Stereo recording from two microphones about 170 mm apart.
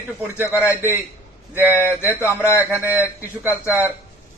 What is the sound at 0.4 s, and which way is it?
Speech, 15° left (ahead or behind).